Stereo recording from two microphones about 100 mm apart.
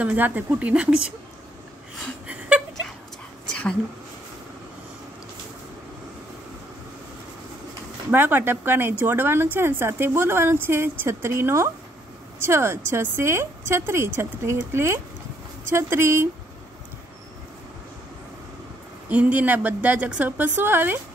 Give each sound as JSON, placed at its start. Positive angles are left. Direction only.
{"t": 0.0, "sound": "a woman's voice", "side_deg": -15}
{"t": 8.1, "sound": "speech", "side_deg": -20}
{"t": 19.0, "sound": "a woman's voice", "side_deg": -15}